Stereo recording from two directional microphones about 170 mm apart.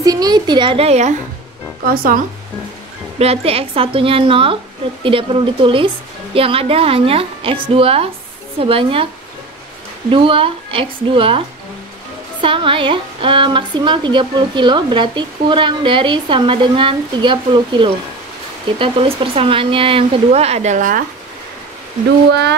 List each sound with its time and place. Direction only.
0.0 s a woman's voice: 20° right (ahead or behind); by 1.1 s 40° right (ahead or behind)
3.2 s speech: 35° right (ahead or behind)
10.1 s a woman's voice: 30° right (ahead or behind); by 21.0 s 50° right (ahead or behind)